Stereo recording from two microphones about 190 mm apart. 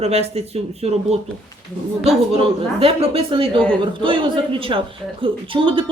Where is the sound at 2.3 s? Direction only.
30° right (ahead or behind).